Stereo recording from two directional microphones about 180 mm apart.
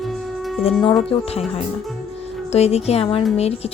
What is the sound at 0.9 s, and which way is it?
Speech, 35° left (ahead or behind).